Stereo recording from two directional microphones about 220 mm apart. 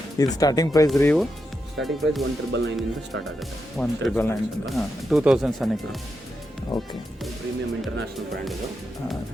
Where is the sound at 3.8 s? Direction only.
5° left (ahead or behind).